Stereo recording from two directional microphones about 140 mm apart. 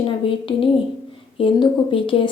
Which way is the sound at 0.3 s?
35° left (ahead or behind).